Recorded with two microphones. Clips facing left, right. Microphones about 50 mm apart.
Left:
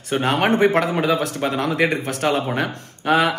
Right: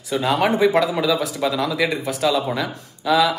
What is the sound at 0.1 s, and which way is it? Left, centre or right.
A man's voice, left.